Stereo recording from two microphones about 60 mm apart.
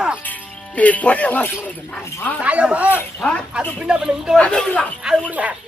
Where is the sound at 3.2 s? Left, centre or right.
Left.